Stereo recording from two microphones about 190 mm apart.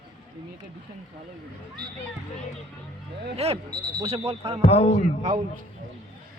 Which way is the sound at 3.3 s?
35° right (ahead or behind).